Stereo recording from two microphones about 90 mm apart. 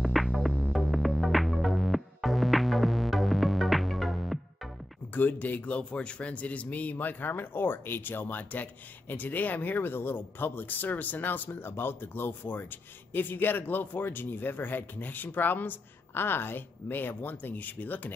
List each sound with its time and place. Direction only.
0.0 s music: centre (ahead or behind)
5.1 s speech: 20° left (ahead or behind)